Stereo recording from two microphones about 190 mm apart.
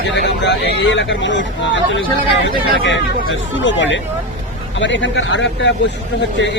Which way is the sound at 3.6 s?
75° left (ahead or behind).